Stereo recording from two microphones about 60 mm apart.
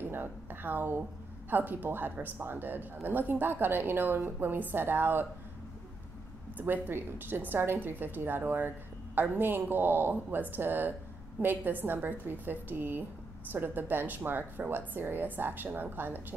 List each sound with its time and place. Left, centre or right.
0.1 s a woman's voice: right
6.6 s a woman's voice: right